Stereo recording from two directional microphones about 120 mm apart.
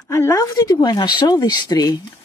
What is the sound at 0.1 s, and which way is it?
Speech, 25° left (ahead or behind).